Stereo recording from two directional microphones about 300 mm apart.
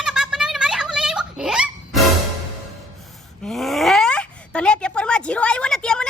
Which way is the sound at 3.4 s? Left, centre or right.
Centre.